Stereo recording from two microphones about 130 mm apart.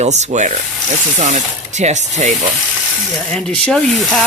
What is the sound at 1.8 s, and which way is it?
Rub, 65° right (ahead or behind).